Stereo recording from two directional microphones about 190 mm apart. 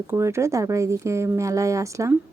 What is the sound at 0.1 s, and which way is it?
Speech, 15° right (ahead or behind).